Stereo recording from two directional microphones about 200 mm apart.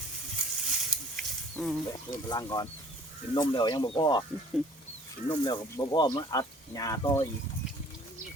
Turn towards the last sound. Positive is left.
turn(degrees=15)  # may be behind; listen again after turning